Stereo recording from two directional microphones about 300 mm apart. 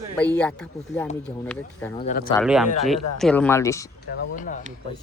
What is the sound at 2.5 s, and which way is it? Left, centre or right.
Speech, centre.